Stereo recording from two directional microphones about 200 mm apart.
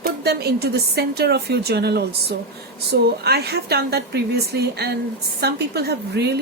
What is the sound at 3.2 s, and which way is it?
A woman's voice, 55° right (ahead or behind).